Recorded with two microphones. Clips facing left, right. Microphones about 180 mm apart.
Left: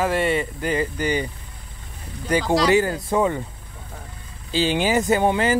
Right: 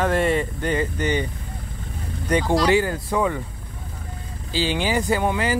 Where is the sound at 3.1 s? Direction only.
25° left (ahead or behind).